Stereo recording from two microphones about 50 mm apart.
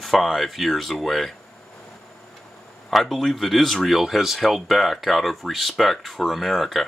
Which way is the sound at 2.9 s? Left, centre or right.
Centre.